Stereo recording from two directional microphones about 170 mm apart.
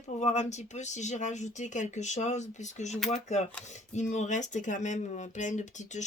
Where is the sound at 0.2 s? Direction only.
45° left (ahead or behind).